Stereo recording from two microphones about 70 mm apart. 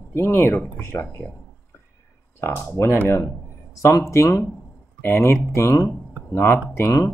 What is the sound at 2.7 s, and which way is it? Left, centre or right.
Speech, left.